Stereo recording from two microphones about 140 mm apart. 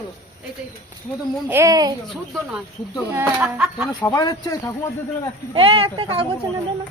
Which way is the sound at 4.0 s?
25° left (ahead or behind).